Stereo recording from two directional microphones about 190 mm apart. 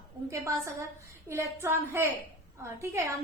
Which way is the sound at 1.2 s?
15° right (ahead or behind).